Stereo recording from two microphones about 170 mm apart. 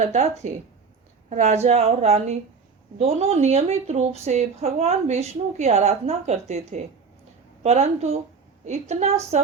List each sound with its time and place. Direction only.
0.0 s speech: 40° right (ahead or behind)
1.3 s speech: 40° right (ahead or behind)